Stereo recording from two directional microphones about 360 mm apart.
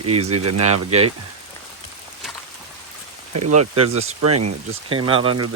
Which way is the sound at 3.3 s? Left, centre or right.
Right.